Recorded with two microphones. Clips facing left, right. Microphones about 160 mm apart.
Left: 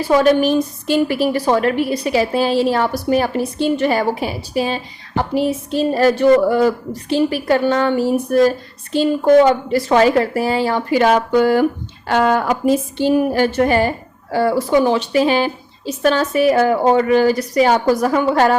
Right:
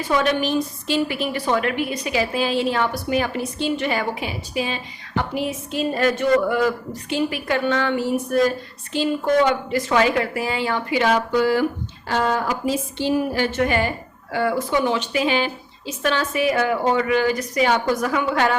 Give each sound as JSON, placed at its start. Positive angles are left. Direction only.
{"t": 0.0, "sound": "a woman's voice", "side_deg": 40}
{"t": 12.0, "sound": "a woman's voice", "side_deg": 65}